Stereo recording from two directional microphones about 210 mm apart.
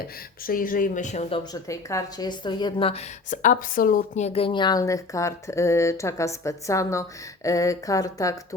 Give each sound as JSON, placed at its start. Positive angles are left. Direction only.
{"t": 0.4, "sound": "speech", "side_deg": 40}
{"t": 1.6, "sound": "a woman's voice", "side_deg": 15}